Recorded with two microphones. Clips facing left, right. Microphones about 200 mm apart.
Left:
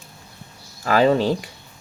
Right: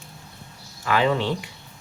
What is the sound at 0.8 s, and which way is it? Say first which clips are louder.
Speech: left 5 dB; 40° left (ahead or behind).